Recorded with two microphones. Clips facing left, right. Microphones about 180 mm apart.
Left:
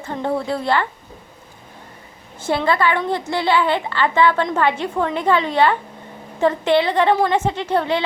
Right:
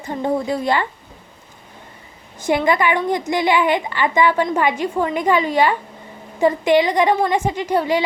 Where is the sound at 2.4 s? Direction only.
15° right (ahead or behind).